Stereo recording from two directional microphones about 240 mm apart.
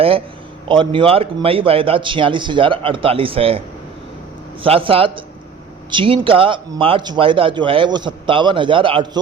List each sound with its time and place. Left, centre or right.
0.7 s speech: right
4.6 s speech: right